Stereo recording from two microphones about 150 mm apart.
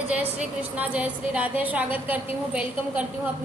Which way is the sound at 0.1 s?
10° right (ahead or behind).